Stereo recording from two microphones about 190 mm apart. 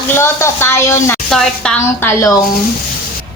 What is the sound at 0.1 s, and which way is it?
A woman's voice, 15° left (ahead or behind).